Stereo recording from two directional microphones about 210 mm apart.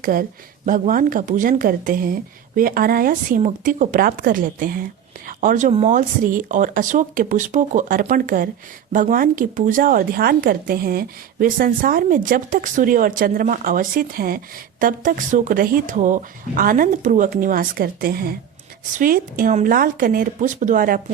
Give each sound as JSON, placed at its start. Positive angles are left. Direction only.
{"t": 0.0, "sound": "a woman's voice", "side_deg": -40}